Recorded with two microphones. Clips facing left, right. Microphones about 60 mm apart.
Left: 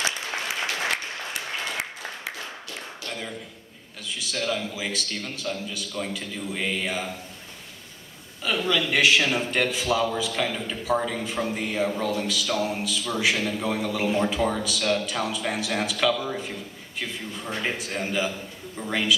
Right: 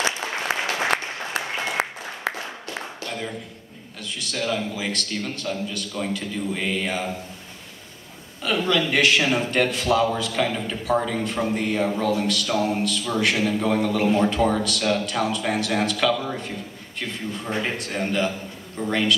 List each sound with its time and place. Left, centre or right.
1.3 s applause: right
3.1 s a sound: centre
4.2 s a man's voice: centre
8.4 s a man's voice: centre